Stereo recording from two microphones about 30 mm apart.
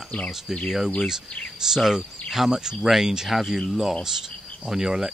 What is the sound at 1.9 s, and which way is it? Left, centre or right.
Speech, centre.